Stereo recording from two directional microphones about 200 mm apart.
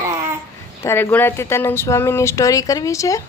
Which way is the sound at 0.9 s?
10° left (ahead or behind).